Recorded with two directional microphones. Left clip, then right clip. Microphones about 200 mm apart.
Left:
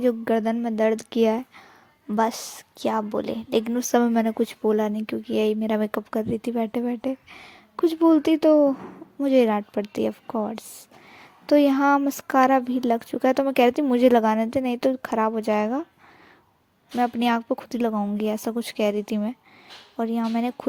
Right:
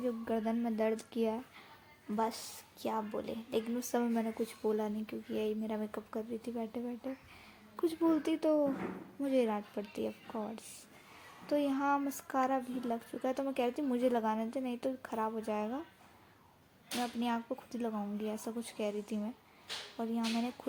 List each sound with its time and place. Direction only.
0.0 s a woman's voice: 45° left (ahead or behind)
17.0 s a woman's voice: 45° left (ahead or behind)